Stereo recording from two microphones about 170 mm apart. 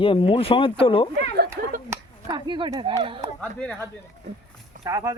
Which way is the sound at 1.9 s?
25° right (ahead or behind).